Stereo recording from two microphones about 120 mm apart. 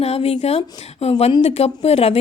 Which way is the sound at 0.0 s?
60° left (ahead or behind).